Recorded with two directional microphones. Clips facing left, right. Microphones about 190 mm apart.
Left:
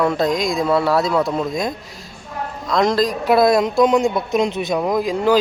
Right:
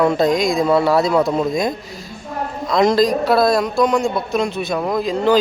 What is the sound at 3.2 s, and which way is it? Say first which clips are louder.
Speech: left 1 dB; 20° left (ahead or behind).